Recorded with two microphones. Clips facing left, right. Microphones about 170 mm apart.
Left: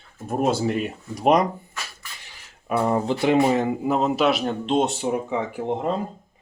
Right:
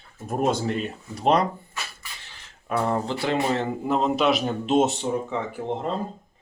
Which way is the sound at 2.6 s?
15° left (ahead or behind).